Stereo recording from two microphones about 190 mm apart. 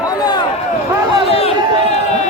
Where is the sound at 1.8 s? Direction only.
35° left (ahead or behind).